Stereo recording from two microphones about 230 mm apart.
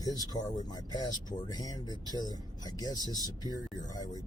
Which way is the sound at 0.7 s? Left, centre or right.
Centre.